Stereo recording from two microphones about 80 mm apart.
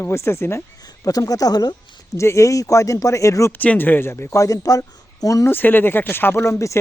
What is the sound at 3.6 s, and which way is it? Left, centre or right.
Speech, left.